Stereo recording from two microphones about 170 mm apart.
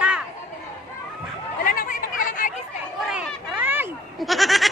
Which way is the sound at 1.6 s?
55° left (ahead or behind).